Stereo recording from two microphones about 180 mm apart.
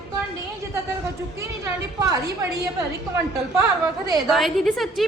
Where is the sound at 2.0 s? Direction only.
20° right (ahead or behind).